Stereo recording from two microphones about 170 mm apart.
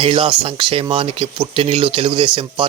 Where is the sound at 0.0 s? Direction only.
30° right (ahead or behind).